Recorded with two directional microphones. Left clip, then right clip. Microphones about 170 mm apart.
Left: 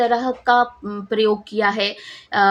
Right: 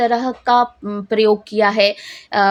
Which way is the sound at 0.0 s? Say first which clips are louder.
Right 1 dB; 40° right (ahead or behind).